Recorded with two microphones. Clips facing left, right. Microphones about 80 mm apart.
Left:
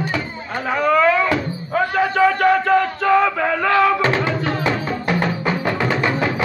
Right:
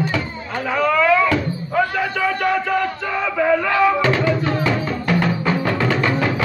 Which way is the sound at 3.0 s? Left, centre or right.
Left.